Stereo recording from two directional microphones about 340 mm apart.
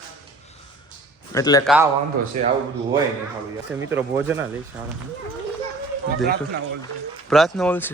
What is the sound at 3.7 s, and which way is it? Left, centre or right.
Speech, centre.